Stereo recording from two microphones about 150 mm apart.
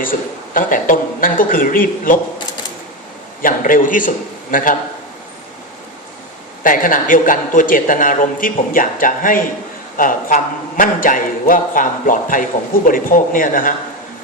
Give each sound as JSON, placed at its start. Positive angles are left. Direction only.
{"t": 0.0, "sound": "a man's voice", "side_deg": 65}
{"t": 3.4, "sound": "a man's voice", "side_deg": 65}
{"t": 6.6, "sound": "a man's voice", "side_deg": 65}